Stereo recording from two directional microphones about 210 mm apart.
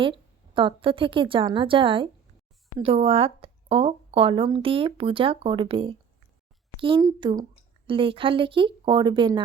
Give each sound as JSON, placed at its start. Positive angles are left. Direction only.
{"t": 0.0, "sound": "speech", "side_deg": -25}